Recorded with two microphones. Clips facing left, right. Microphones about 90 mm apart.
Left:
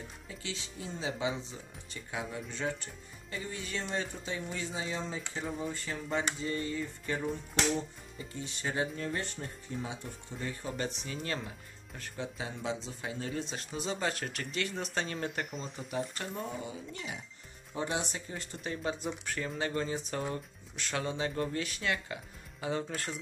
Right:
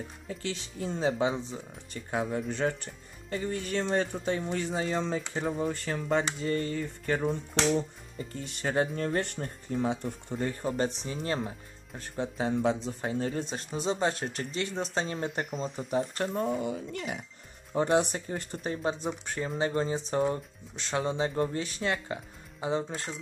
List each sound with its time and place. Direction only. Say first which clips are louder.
0.3 s speech: right 7 dB; 50° right (ahead or behind)
10.3 s speech: right 8 dB; 45° right (ahead or behind)
11.2 s speech: right 8 dB; 35° right (ahead or behind)
15.5 s speech: right 7 dB; centre (ahead or behind)
15.9 s speech: right 7 dB; 45° right (ahead or behind); by 23.1 s 20° right (ahead or behind)